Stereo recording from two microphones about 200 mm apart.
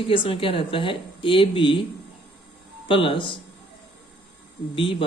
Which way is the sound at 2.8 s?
25° left (ahead or behind).